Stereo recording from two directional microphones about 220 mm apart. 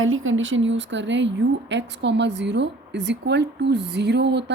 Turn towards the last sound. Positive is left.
turn(degrees=-50)  # may be behind; listen again after turning